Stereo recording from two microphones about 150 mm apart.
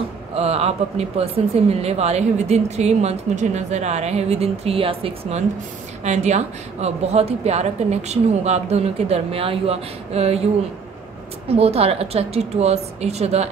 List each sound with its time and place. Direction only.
0.3 s speech: 45° right (ahead or behind)
6.0 s speech: 50° right (ahead or behind)